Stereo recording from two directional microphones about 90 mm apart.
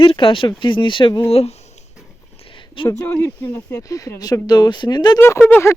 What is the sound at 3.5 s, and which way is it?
Speech, 35° left (ahead or behind).